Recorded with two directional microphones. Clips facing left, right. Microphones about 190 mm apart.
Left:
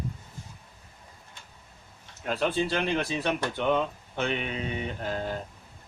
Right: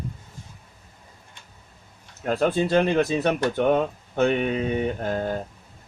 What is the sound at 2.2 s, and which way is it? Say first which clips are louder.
Speech: right 5 dB; 45° right (ahead or behind).